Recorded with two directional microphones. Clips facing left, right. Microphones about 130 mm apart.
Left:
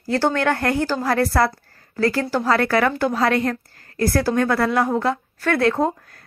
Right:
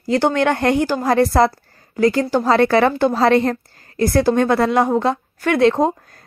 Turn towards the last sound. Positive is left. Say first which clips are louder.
# right 4 dB
turn(degrees=-20)  # may be behind; listen again after turning